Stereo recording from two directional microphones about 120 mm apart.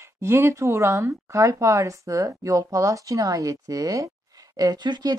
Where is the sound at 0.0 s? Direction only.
20° right (ahead or behind).